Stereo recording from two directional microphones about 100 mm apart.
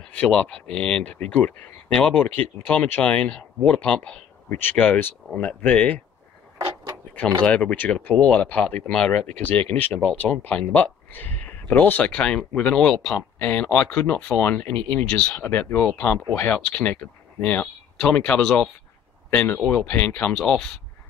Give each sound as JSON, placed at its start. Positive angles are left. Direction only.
{"t": 0.0, "sound": "speech", "side_deg": 15}
{"t": 7.4, "sound": "speech", "side_deg": 10}
{"t": 13.4, "sound": "speech", "side_deg": 15}